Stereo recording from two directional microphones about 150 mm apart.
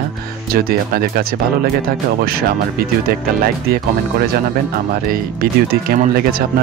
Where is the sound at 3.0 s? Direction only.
85° right.